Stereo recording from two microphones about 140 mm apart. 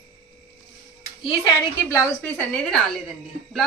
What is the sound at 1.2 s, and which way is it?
Speech, 40° left (ahead or behind).